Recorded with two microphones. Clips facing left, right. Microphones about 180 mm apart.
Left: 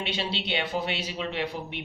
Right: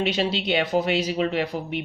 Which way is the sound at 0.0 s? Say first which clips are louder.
Right 8 dB; 45° right (ahead or behind).